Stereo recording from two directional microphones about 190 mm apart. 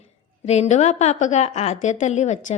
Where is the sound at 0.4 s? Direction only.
35° left (ahead or behind).